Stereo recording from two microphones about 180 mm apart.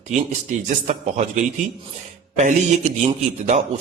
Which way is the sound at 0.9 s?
40° right (ahead or behind).